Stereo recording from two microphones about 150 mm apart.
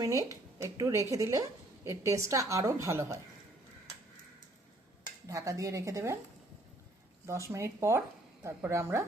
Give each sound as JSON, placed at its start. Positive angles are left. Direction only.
{"t": 0.0, "sound": "a woman's voice", "side_deg": -20}
{"t": 5.3, "sound": "a woman's voice", "side_deg": -20}
{"t": 7.3, "sound": "a woman's voice", "side_deg": -20}